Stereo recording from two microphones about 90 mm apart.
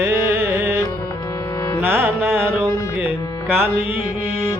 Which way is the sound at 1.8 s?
25° right (ahead or behind).